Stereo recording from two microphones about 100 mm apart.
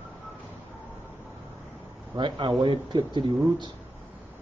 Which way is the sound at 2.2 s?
50° right (ahead or behind).